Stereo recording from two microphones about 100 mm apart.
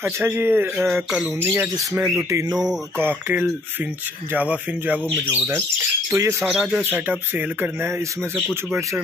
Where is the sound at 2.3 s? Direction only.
30° right (ahead or behind).